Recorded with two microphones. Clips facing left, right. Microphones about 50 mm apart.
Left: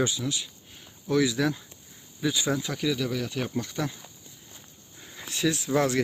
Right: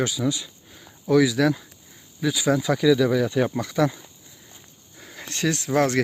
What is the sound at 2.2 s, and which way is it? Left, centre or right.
Speech, right.